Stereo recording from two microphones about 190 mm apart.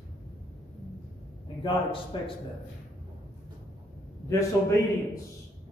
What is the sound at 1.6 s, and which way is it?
Speech, 30° left (ahead or behind).